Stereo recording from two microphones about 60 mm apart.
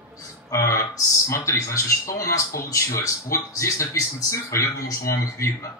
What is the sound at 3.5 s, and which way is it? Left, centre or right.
A man's voice, left.